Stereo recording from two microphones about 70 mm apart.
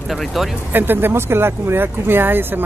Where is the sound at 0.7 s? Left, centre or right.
Right.